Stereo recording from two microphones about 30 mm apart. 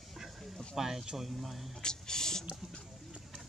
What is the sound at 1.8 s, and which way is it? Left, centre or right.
Speech, left.